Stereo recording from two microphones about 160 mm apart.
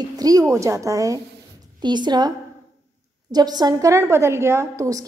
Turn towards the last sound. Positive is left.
turn(degrees=-20)  # may be behind; listen again after turning